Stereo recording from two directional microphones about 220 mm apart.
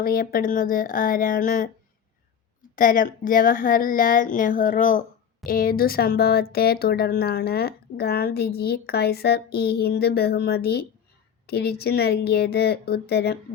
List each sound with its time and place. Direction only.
0.0 s a woman's voice: 40° left (ahead or behind)
2.7 s a woman's voice: 40° left (ahead or behind)